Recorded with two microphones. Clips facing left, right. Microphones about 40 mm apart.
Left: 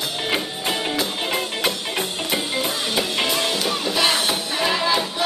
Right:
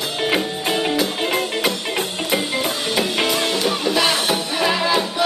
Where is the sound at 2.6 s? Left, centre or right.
Centre.